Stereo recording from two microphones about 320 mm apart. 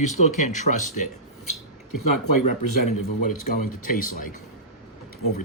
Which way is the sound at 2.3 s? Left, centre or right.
Left.